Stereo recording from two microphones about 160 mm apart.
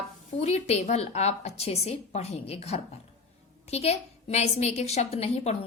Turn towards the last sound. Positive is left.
turn(degrees=40)  # may be behind; listen again after turning